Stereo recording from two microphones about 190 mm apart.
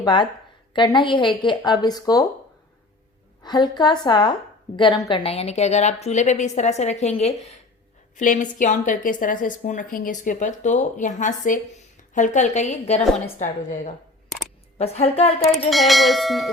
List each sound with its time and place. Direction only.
0.0 s speech: 25° left (ahead or behind)
3.4 s a woman's voice: 25° left (ahead or behind)
15.7 s bell: centre (ahead or behind)